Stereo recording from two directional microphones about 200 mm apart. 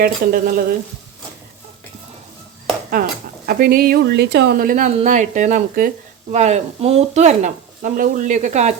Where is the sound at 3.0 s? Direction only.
45° right (ahead or behind).